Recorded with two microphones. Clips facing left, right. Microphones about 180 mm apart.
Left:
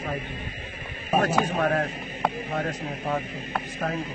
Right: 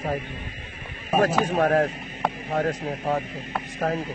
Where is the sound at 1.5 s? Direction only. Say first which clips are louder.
Right 4 dB; 40° right (ahead or behind).